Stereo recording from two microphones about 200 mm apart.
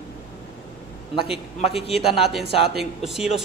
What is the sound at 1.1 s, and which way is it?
Speech, 25° left (ahead or behind).